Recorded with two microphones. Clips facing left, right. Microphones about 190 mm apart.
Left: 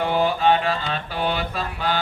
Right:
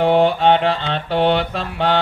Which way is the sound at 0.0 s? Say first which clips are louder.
Right 6 dB; 70° right (ahead or behind).